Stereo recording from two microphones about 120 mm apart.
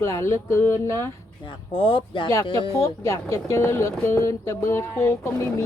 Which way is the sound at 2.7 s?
25° left (ahead or behind).